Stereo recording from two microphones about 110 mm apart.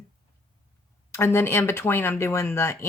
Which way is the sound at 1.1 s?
25° left (ahead or behind).